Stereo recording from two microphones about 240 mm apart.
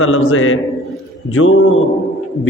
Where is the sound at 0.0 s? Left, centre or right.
Left.